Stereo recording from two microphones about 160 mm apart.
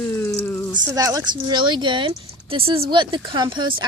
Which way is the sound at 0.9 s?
20° right (ahead or behind).